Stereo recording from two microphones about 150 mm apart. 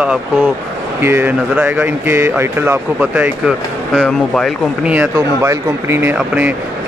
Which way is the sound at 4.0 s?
5° left (ahead or behind).